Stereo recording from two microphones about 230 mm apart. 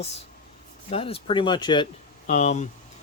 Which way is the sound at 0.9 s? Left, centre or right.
Left.